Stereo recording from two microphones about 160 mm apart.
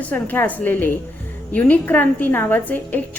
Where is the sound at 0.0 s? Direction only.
10° left (ahead or behind).